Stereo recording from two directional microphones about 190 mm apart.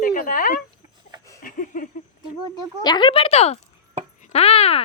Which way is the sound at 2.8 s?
25° left (ahead or behind).